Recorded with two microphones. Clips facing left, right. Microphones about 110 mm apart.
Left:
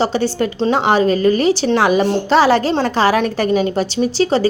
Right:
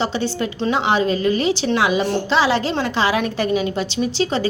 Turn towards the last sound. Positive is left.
turn(degrees=40)  # may be behind; listen again after turning